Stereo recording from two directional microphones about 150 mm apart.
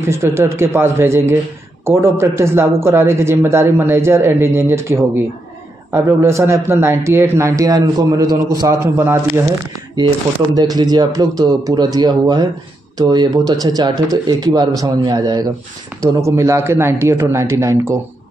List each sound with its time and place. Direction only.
0.0 s speech: 15° right (ahead or behind)
8.7 s speech: 15° right (ahead or behind)
9.9 s speech: 30° right (ahead or behind)